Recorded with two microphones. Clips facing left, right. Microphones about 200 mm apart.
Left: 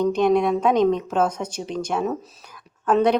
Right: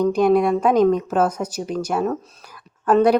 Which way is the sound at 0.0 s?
5° right (ahead or behind).